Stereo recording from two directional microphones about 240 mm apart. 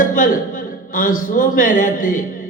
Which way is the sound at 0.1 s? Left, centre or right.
Left.